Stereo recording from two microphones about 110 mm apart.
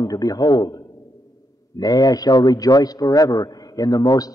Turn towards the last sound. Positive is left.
turn(degrees=35)  # may be behind; listen again after turning